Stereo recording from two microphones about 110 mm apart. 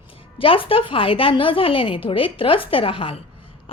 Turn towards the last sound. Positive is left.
turn(degrees=55)  # may be behind; listen again after turning